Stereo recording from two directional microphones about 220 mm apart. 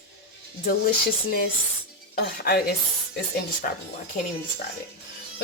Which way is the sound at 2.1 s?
45° left (ahead or behind).